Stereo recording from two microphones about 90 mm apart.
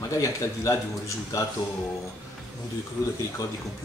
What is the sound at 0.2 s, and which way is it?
Speech, 35° left (ahead or behind).